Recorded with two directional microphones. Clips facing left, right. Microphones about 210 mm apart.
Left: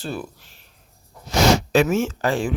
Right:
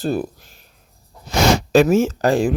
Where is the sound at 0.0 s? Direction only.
40° right (ahead or behind).